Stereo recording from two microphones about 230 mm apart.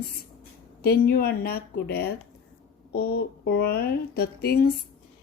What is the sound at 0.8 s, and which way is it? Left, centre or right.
Speech, left.